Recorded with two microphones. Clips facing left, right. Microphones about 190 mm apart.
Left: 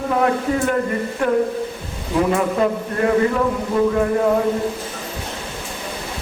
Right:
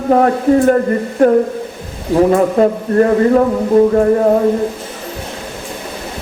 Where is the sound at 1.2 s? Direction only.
40° right (ahead or behind).